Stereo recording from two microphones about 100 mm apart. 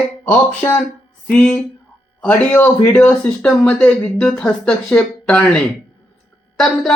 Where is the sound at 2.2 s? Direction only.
20° left (ahead or behind).